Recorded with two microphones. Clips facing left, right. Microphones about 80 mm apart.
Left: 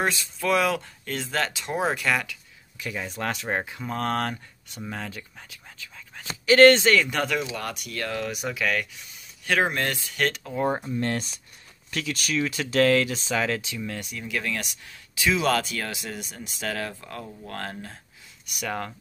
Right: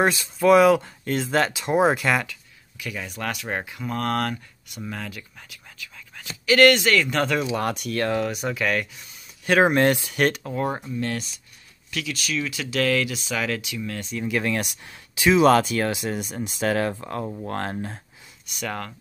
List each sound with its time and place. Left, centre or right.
0.4 s speech: centre
2.8 s speech: left
3.4 s speech: centre
5.1 s whispering: left
6.4 s speech: left
7.2 s speech: centre
7.6 s speech: right
8.3 s speech: centre
9.5 s speech: right
11.0 s speech: left
13.7 s speech: centre
14.4 s speech: right
18.6 s speech: centre